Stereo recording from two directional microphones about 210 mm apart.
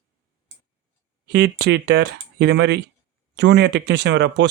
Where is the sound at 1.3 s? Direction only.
50° right (ahead or behind).